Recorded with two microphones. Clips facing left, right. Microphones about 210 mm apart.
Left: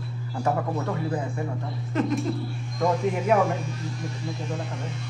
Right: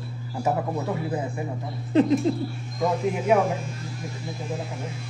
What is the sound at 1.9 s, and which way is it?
Speech, 30° right (ahead or behind).